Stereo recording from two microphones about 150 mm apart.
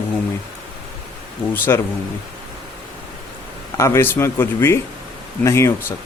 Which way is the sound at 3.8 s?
15° left (ahead or behind).